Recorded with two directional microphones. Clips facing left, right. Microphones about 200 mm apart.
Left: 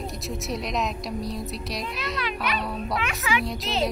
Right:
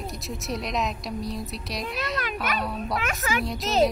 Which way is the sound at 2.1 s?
45° right (ahead or behind).